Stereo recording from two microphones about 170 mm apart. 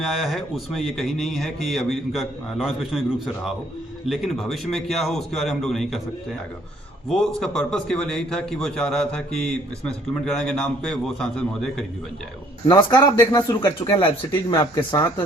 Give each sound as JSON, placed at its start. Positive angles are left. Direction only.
{"t": 0.0, "sound": "speech", "side_deg": 0}
{"t": 7.3, "sound": "speech", "side_deg": 5}
{"t": 12.6, "sound": "speech", "side_deg": 25}